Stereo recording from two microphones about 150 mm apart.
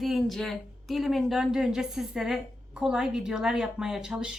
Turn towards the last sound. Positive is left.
turn(degrees=-5)  # may be behind; listen again after turning